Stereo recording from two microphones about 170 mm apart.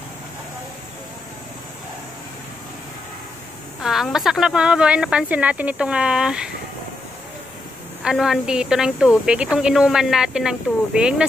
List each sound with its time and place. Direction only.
3.8 s a woman's voice: centre (ahead or behind)
8.0 s a woman's voice: 5° right (ahead or behind)